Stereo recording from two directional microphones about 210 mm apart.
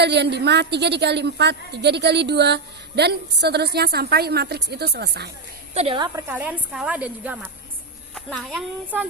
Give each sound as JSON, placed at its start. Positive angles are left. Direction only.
{"t": 0.0, "sound": "a woman's voice", "side_deg": -55}
{"t": 5.7, "sound": "a woman's voice", "side_deg": -25}